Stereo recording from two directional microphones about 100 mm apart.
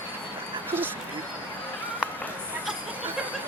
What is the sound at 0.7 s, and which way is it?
Speech, 20° right (ahead or behind).